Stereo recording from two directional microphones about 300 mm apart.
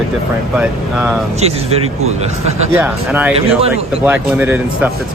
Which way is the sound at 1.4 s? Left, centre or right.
Right.